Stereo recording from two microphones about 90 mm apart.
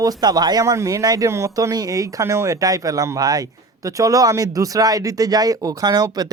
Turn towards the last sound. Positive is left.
turn(degrees=-45)  # may be behind; listen again after turning